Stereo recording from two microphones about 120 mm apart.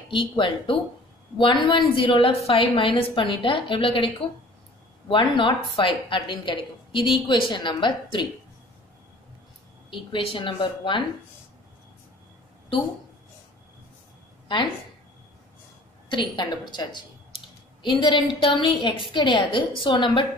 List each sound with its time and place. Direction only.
0.1 s a woman's voice: 45° left (ahead or behind)
5.1 s a woman's voice: 40° left (ahead or behind)
9.8 s a woman's voice: 45° left (ahead or behind)
16.1 s a woman's voice: 40° left (ahead or behind)